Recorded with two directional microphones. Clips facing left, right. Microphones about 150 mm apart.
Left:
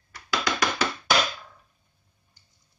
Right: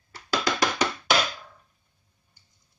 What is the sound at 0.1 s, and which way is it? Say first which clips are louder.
Music: right 1 dB; 30° right (ahead or behind).